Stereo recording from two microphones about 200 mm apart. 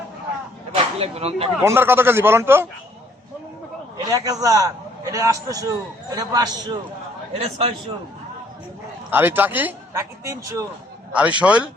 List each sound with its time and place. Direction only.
0.7 s speech: 30° right (ahead or behind)
1.6 s a man's voice: 10° right (ahead or behind)
4.1 s a man's voice: 15° right (ahead or behind)
7.3 s a man's voice: 30° right (ahead or behind)
9.0 s a man's voice: 10° right (ahead or behind)